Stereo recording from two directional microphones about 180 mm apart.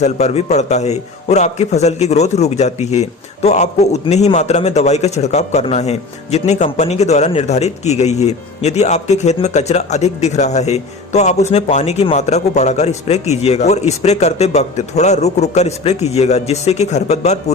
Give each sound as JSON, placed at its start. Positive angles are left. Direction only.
{"t": 0.0, "sound": "a man's voice", "side_deg": 35}